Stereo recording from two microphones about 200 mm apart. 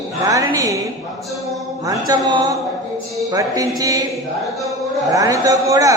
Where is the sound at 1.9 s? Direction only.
20° right (ahead or behind).